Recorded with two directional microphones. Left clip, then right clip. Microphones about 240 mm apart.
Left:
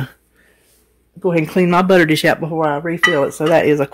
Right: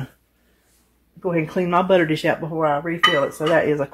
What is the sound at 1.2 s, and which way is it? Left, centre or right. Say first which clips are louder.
Speech: left 6 dB; left.